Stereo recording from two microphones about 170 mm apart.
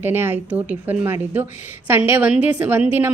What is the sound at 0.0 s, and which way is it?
A woman's voice, 15° right (ahead or behind).